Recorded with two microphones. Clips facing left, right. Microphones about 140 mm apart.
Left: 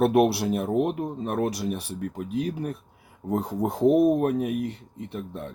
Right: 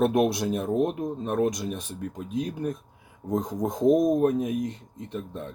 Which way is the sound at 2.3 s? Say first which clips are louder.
Left 2 dB; 70° left (ahead or behind).